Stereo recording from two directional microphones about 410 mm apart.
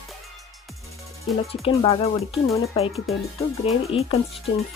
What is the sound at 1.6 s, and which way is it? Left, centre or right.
Speech, centre.